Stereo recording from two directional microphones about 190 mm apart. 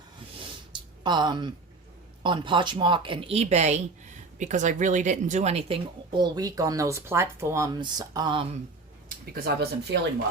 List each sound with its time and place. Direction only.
1.0 s speech: 20° right (ahead or behind)
9.0 s speech: 55° right (ahead or behind)